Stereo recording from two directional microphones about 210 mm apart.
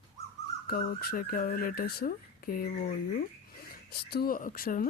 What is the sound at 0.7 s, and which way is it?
Speech, 45° left (ahead or behind).